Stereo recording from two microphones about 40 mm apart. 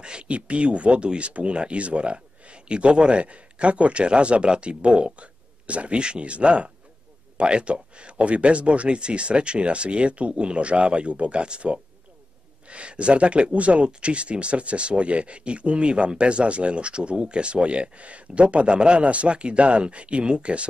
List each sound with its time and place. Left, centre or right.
0.0 s speech: right